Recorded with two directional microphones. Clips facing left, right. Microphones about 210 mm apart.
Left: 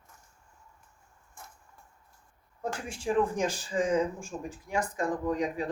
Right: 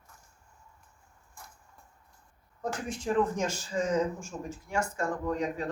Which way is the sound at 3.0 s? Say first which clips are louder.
Left 1 dB; 10° left (ahead or behind).